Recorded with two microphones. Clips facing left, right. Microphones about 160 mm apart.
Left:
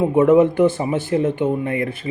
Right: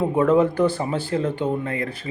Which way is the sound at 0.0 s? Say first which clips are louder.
Left 4 dB; 20° left (ahead or behind).